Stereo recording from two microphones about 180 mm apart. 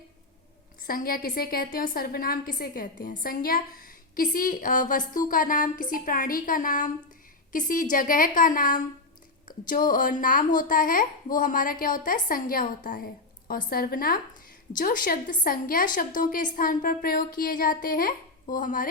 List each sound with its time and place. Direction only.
0.9 s a woman's voice: 55° left (ahead or behind)